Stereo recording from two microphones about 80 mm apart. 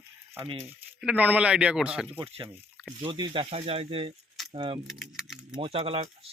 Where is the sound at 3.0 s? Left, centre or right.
Right.